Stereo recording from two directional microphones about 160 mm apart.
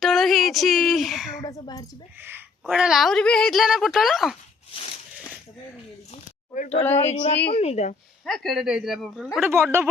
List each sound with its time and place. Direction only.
0.0 s a sound: centre (ahead or behind)
1.5 s speech: 20° left (ahead or behind)
2.6 s a woman's voice: 5° right (ahead or behind)
6.5 s a woman's voice: 55° left (ahead or behind)
8.2 s a woman's voice: centre (ahead or behind)